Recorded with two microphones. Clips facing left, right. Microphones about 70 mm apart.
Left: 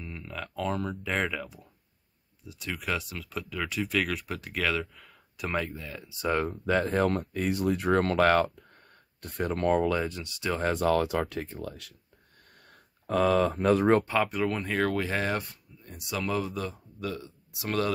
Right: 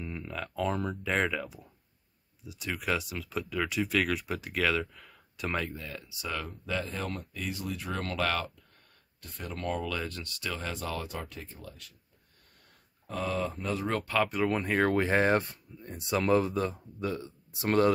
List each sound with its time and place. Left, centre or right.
0.0 s speech: centre
6.0 s speech: left
9.9 s speech: centre
10.5 s speech: left
13.0 s speech: left
14.1 s speech: centre
14.9 s speech: right